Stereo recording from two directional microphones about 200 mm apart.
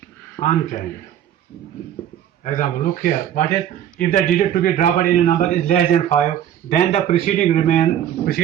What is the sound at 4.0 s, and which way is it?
A man's voice, 40° left (ahead or behind).